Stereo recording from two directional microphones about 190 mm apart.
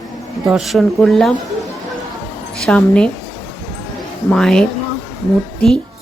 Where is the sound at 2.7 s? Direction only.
5° left (ahead or behind).